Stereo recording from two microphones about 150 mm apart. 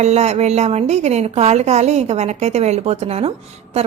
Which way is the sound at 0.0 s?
45° right (ahead or behind).